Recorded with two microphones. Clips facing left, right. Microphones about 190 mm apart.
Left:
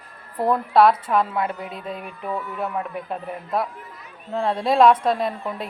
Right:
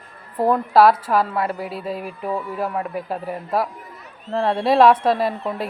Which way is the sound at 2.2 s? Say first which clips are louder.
Right 3 dB; 30° right (ahead or behind).